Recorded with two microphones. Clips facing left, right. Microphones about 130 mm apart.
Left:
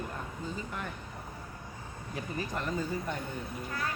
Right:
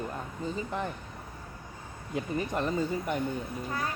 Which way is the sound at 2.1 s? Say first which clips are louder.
Right 5 dB; 20° right (ahead or behind).